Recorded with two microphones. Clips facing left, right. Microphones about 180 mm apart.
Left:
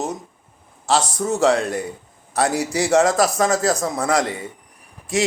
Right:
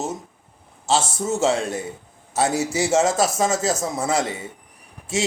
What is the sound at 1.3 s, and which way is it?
A man's voice, 25° right (ahead or behind).